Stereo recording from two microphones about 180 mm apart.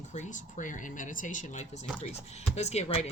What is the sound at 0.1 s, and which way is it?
Speech, 40° left (ahead or behind).